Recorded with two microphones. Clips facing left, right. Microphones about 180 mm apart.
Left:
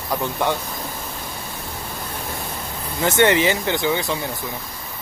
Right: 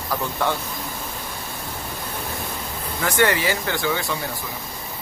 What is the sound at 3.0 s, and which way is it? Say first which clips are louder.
Speech: left 4 dB; 25° left (ahead or behind).